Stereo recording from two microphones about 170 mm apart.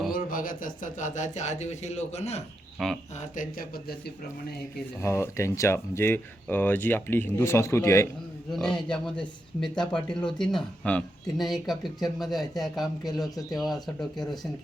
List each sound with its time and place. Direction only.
0.1 s speech: 55° left (ahead or behind)
2.7 s speech: centre (ahead or behind)
3.2 s speech: 55° left (ahead or behind)
4.9 s speech: 15° left (ahead or behind)
8.5 s speech: 5° left (ahead or behind)